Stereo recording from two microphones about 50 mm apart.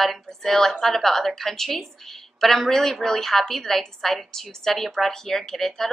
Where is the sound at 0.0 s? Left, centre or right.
Centre.